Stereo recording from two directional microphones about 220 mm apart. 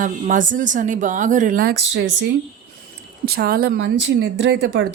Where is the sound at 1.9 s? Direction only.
50° right (ahead or behind).